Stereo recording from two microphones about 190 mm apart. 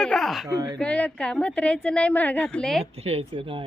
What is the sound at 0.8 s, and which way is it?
Speech, 5° left (ahead or behind).